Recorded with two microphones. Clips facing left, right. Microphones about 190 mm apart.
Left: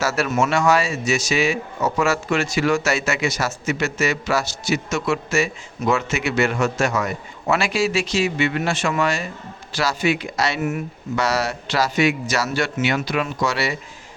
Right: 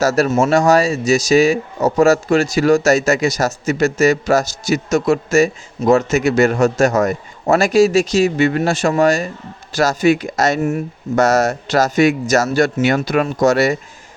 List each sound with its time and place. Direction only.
0.0 s speech: 40° right (ahead or behind)